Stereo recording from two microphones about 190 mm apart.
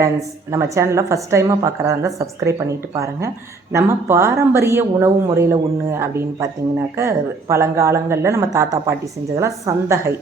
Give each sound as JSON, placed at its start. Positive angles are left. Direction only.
{"t": 0.0, "sound": "a woman's voice", "side_deg": -15}